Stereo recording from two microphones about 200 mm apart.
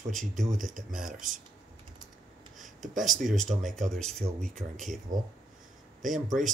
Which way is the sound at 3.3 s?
40° right (ahead or behind).